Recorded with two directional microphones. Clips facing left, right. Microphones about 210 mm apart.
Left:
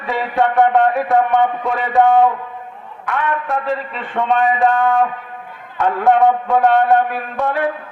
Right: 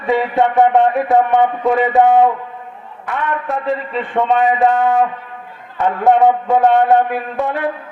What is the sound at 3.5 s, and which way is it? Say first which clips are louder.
A man's voice: right 2 dB; centre (ahead or behind).